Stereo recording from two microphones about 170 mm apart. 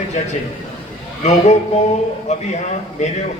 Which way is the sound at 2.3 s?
40° left (ahead or behind).